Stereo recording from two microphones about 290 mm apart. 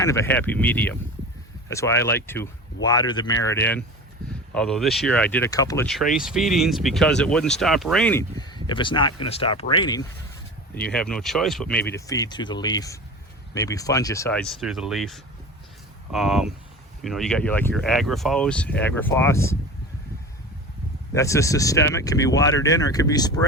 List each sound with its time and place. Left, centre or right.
0.0 s speech: centre
10.9 s speech: centre
21.1 s speech: centre